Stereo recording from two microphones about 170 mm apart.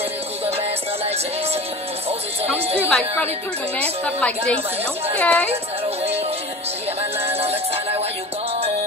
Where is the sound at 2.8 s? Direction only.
10° left (ahead or behind).